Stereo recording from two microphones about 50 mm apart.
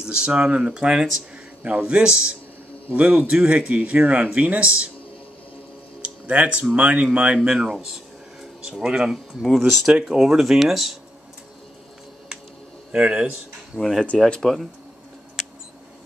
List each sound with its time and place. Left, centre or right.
0.0 s speech: centre
1.6 s speech: right
2.9 s speech: right
6.0 s speech: right; by 11.0 s centre
12.9 s speech: right
13.7 s speech: centre